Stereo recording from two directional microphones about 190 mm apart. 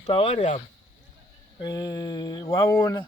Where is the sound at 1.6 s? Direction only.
20° left (ahead or behind).